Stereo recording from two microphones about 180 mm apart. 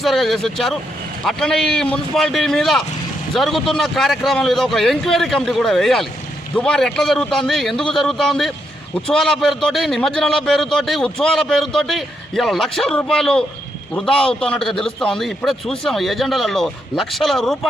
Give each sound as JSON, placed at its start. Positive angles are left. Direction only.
{"t": 0.0, "sound": "a man's voice", "side_deg": 0}